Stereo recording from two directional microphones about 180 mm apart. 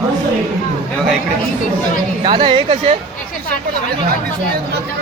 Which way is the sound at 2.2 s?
25° right (ahead or behind).